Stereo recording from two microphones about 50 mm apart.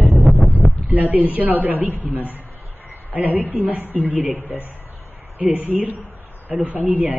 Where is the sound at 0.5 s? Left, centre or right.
Right.